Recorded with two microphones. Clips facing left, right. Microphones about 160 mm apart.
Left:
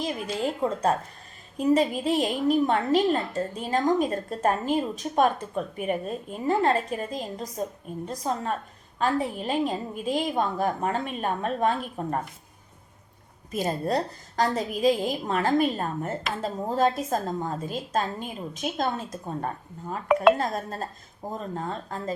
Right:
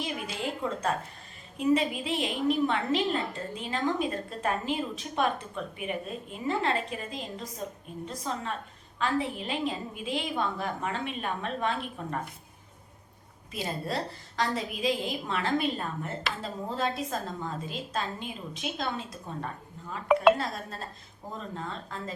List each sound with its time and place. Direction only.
0.6 s a woman's voice: 35° left (ahead or behind)
13.5 s a woman's voice: 45° left (ahead or behind)